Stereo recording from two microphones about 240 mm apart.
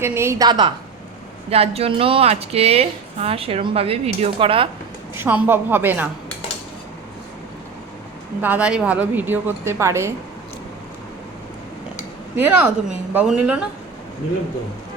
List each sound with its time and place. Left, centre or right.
0.0 s a woman's voice: centre
5.1 s a woman's voice: centre
8.4 s a woman's voice: centre
12.4 s a woman's voice: centre